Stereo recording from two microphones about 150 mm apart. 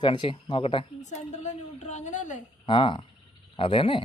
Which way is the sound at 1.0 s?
50° left (ahead or behind).